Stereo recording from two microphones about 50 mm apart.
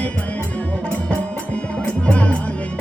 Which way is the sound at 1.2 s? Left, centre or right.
Left.